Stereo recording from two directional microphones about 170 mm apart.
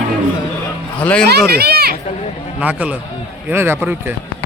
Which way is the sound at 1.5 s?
70° right (ahead or behind).